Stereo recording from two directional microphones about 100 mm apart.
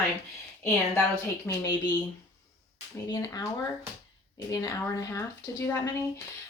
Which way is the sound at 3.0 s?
40° left (ahead or behind).